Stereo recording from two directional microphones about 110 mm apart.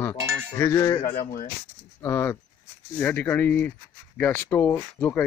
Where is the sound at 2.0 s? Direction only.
25° left (ahead or behind).